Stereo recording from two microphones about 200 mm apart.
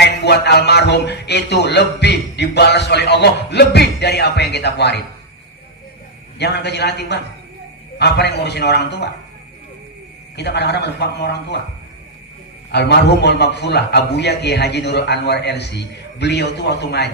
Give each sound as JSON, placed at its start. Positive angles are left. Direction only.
{"t": 0.0, "sound": "a man's voice", "side_deg": 55}
{"t": 6.4, "sound": "a man's voice", "side_deg": 55}
{"t": 10.3, "sound": "a man's voice", "side_deg": 55}
{"t": 12.7, "sound": "a man's voice", "side_deg": 55}